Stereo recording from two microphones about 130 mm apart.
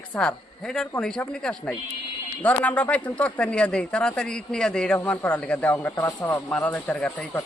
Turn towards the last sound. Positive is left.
turn(degrees=10)  # may be behind; listen again after turning